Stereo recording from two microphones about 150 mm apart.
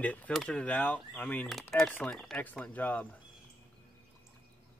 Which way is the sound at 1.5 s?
Centre (ahead or behind).